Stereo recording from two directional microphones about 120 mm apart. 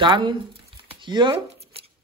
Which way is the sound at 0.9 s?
40° right (ahead or behind).